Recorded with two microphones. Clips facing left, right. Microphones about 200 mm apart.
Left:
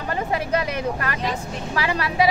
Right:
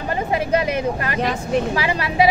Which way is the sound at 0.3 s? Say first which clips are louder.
Right 5 dB; 20° right (ahead or behind).